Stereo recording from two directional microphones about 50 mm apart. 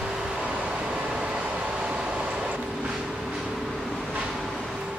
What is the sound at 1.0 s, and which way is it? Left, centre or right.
Vehicle, centre.